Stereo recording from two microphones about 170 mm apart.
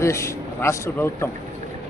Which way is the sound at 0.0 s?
15° left (ahead or behind).